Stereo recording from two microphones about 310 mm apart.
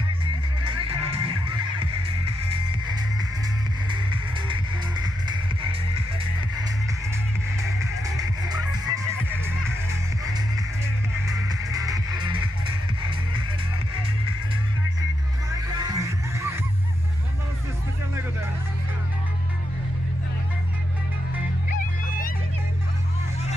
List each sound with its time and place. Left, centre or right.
0.7 s music: centre
3.9 s music: centre
8.2 s music: centre
11.2 s music: centre
15.8 s music: centre